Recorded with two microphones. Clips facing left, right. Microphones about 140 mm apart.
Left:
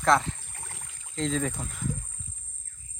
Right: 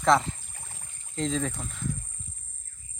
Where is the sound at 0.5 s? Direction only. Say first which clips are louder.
Left 3 dB; 70° left (ahead or behind); by 1.1 s 85° left.